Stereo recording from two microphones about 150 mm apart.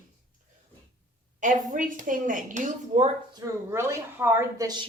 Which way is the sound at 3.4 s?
20° right (ahead or behind).